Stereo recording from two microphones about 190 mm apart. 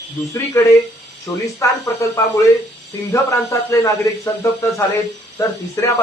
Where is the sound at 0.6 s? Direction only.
15° left (ahead or behind).